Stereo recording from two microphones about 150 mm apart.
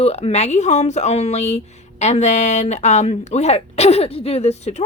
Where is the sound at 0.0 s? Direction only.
45° left (ahead or behind).